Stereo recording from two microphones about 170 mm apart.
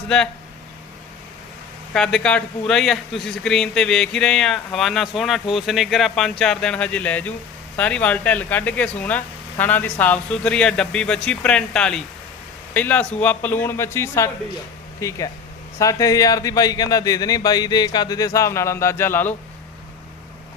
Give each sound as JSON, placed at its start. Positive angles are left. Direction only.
{"t": 1.9, "sound": "a man's voice", "side_deg": 5}